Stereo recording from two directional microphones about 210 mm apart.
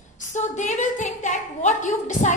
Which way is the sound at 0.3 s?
35° left (ahead or behind).